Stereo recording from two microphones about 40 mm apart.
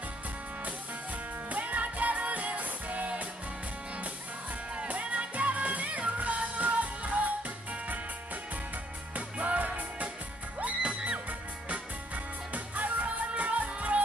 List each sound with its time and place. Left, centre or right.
1.5 s music: right
4.8 s music: right
9.1 s music: right